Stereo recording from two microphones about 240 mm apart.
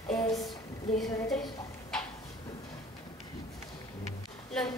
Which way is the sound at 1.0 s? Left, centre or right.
Centre.